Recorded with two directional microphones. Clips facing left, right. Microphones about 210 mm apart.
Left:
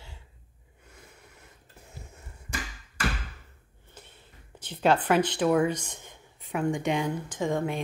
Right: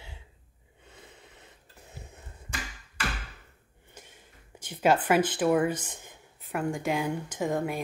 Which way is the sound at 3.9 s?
10° right (ahead or behind).